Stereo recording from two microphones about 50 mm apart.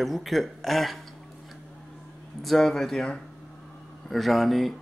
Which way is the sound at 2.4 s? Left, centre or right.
Centre.